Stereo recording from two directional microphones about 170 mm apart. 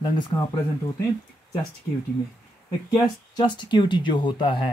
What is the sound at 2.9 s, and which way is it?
Speech, 25° left (ahead or behind).